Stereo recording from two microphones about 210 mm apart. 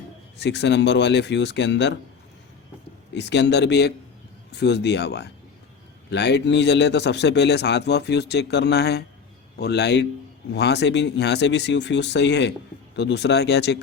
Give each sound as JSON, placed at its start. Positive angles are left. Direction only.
{"t": 0.3, "sound": "speech", "side_deg": 55}
{"t": 3.2, "sound": "speech", "side_deg": 55}